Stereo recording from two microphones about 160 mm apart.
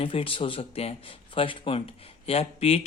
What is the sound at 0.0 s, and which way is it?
A man's voice, 35° left (ahead or behind).